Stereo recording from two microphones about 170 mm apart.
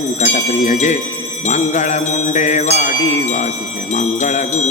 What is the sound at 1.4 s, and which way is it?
Jingle bell, 45° left (ahead or behind).